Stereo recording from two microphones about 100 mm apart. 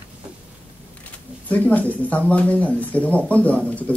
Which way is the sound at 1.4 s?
15° left (ahead or behind).